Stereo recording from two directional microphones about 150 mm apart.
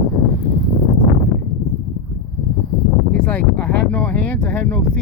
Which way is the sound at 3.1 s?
10° left (ahead or behind).